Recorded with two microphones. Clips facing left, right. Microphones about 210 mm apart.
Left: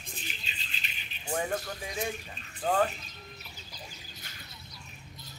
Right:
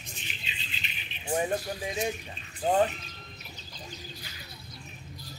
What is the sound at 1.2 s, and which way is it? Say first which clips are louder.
Speech: right 3 dB; 20° right (ahead or behind).